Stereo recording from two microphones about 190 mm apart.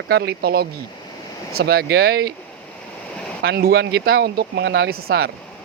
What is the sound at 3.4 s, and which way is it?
Speech, 55° right (ahead or behind).